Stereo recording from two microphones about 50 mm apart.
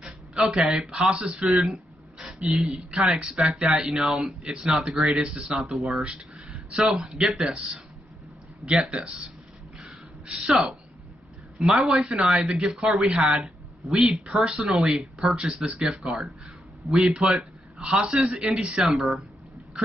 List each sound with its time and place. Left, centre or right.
0.0 s speech: centre
1.6 s a sound: centre
2.6 s speech: centre
3.1 s speech: centre
5.2 s speech: centre
5.6 s speech: centre
6.0 s a sound: right
6.8 s speech: centre
8.6 s speech: centre
9.8 s gasp: centre
10.4 s speech: centre
15.3 s a man's voice: centre
18.8 s speech: centre